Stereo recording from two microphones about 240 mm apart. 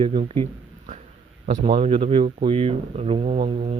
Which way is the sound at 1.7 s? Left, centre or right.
Right.